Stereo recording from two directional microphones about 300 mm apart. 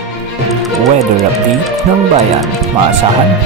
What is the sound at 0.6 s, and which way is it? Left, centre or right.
Music, centre.